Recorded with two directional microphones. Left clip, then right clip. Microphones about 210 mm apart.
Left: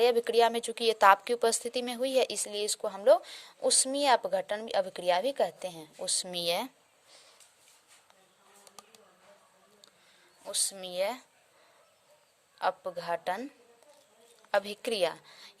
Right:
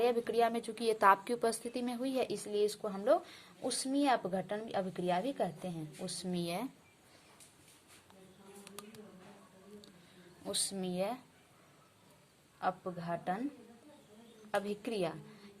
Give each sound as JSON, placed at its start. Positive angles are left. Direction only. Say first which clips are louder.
{"t": 0.0, "sound": "a woman's voice", "louder": "left 6 dB", "side_deg": 45}
{"t": 10.4, "sound": "speech", "louder": "left 3 dB", "side_deg": 25}
{"t": 12.5, "sound": "a woman's voice", "louder": "left 6 dB", "side_deg": 45}
{"t": 14.5, "sound": "a woman's voice", "louder": "left 6 dB", "side_deg": 45}